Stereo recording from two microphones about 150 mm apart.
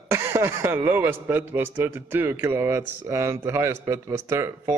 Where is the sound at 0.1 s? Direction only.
15° right (ahead or behind).